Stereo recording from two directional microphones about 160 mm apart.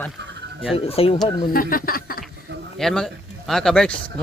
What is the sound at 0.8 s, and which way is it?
Speech, 40° left (ahead or behind).